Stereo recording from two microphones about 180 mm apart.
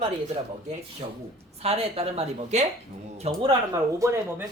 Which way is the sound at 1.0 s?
25° right (ahead or behind).